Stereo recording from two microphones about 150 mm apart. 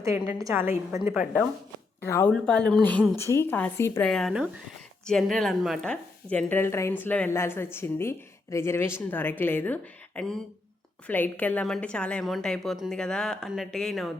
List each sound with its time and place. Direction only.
0.0 s a woman's voice: 20° right (ahead or behind)
2.0 s a woman's voice: 15° left (ahead or behind)
4.0 s a woman's voice: 5° left (ahead or behind)